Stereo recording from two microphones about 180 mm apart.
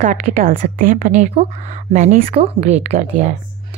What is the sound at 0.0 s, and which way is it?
A woman's voice, 45° right (ahead or behind).